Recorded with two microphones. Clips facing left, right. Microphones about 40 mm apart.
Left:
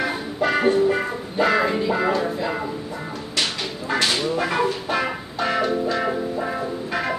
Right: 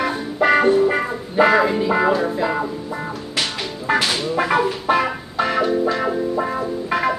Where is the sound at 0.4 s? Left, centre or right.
Centre.